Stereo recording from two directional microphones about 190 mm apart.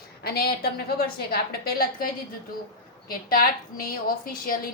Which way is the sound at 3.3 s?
50° left (ahead or behind).